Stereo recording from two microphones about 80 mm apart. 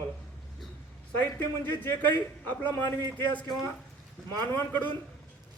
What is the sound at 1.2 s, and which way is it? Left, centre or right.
A man's voice, left.